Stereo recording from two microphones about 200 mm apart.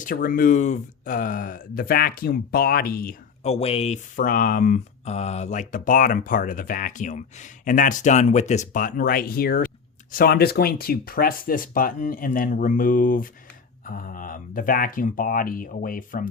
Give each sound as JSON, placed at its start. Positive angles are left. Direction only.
{"t": 0.0, "sound": "speech", "side_deg": 45}
{"t": 3.4, "sound": "speech", "side_deg": 30}